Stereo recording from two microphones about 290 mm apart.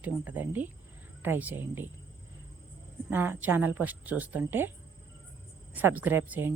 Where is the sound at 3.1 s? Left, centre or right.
Centre.